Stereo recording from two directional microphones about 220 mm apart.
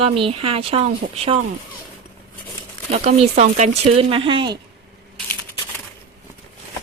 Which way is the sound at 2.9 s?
30° right (ahead or behind).